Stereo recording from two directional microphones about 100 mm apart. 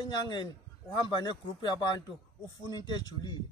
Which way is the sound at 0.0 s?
50° left (ahead or behind).